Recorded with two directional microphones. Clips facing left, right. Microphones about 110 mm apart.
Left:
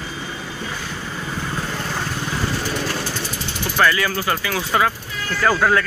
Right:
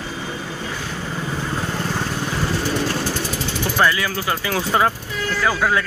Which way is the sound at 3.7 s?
10° right (ahead or behind).